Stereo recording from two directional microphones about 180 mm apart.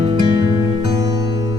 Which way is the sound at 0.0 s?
25° right (ahead or behind).